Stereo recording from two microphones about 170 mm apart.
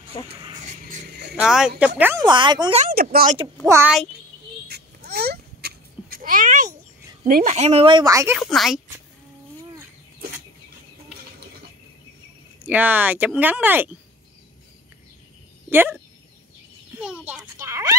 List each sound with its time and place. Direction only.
1.3 s speech: 5° right (ahead or behind)
2.2 s speech: 25° right (ahead or behind)
2.9 s speech: 60° right (ahead or behind)
3.6 s speech: 15° right (ahead or behind)
5.1 s a sound: 70° right (ahead or behind); by 6.7 s 50° right (ahead or behind)
7.2 s speech: 60° right (ahead or behind)
7.5 s speech: 40° right (ahead or behind); by 8.4 s 20° right (ahead or behind)
8.4 s speech: centre (ahead or behind)
12.6 s speech: 10° right (ahead or behind)
15.7 s speech: 10° right (ahead or behind)
17.0 s a child's voice: 5° right (ahead or behind)
17.6 s a sound: 15° right (ahead or behind)